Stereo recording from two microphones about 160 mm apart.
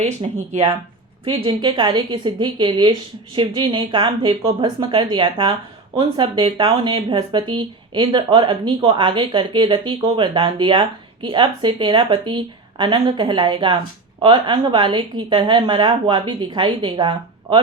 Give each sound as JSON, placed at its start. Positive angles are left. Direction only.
{"t": 0.0, "sound": "a woman's voice", "side_deg": -40}